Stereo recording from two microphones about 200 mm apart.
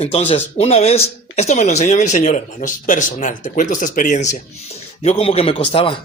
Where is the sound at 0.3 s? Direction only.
30° left (ahead or behind).